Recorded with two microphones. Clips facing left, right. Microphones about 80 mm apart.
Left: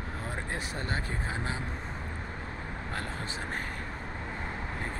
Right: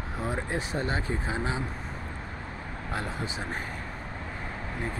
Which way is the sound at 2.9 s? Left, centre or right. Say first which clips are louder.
Right 5 dB; centre.